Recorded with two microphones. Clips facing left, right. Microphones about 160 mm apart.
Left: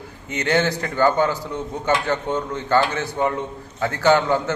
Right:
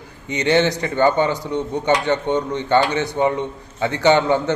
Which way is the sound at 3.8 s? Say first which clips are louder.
Right 1 dB; 5° left (ahead or behind).